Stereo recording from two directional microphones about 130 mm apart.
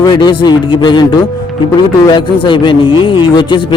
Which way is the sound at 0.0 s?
30° left (ahead or behind).